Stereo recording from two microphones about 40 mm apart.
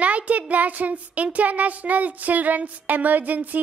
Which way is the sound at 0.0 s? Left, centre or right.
Right.